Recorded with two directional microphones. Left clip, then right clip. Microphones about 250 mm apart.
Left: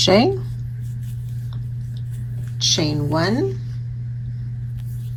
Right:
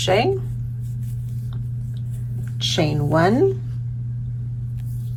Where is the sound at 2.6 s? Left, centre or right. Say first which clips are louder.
Left 2 dB; centre.